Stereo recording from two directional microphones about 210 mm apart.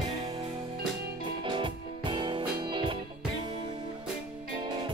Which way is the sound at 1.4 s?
25° right (ahead or behind).